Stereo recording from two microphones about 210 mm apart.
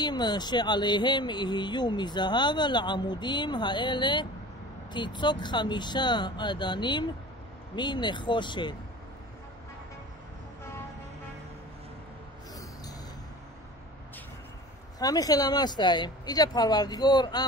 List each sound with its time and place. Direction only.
0.0 s speech: 20° left (ahead or behind)
15.0 s speech: 15° left (ahead or behind)